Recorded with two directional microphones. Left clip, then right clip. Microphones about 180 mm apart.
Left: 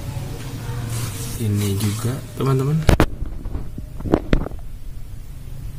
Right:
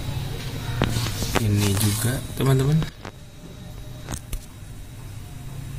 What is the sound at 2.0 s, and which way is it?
Speech, centre (ahead or behind).